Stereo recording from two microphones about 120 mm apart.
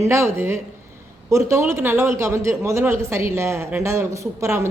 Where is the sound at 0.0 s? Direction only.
20° right (ahead or behind).